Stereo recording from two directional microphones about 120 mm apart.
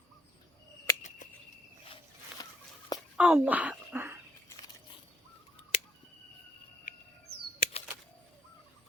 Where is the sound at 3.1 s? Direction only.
10° right (ahead or behind).